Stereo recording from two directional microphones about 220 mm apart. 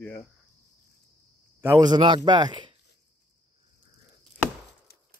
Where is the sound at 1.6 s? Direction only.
15° right (ahead or behind).